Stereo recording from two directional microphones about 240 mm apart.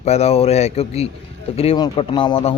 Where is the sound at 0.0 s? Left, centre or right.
Left.